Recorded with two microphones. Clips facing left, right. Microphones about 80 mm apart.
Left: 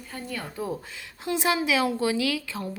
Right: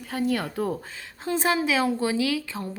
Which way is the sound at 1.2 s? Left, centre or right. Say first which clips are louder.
Right 1 dB; right.